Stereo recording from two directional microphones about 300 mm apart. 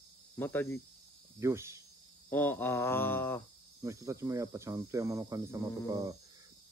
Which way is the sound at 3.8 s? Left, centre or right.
Centre.